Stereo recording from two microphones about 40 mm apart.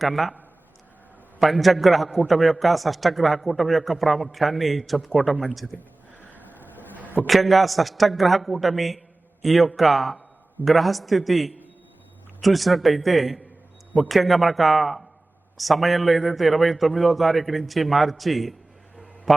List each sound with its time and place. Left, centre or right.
0.0 s speech: centre
1.5 s speech: centre
6.1 s a sound: left
7.3 s speech: centre